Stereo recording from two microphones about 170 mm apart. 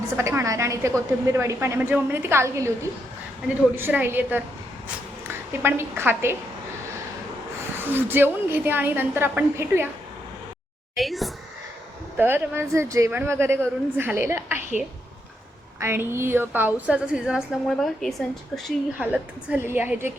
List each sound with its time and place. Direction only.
0.2 s a woman's voice: 15° right (ahead or behind)
3.8 s a woman's voice: 15° right (ahead or behind)
5.6 s a woman's voice: 15° right (ahead or behind)
7.9 s a woman's voice: 10° right (ahead or behind)
10.9 s a sound: centre (ahead or behind)
12.1 s a woman's voice: 10° right (ahead or behind)
15.8 s a woman's voice: 15° right (ahead or behind)